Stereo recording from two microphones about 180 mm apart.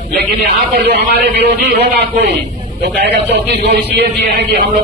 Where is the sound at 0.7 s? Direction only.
65° right (ahead or behind).